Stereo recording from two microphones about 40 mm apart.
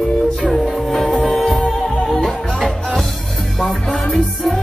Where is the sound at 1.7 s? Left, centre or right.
Centre.